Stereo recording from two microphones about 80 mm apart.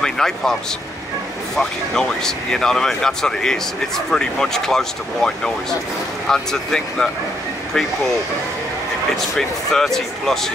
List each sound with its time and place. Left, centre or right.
0.0 s speech: centre
1.6 s speech: centre
9.1 s speech: centre